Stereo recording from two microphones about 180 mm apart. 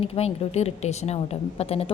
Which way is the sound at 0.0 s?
35° left (ahead or behind).